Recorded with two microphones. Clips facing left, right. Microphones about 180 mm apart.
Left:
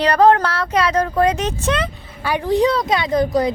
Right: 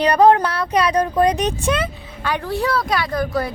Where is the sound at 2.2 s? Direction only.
10° left (ahead or behind).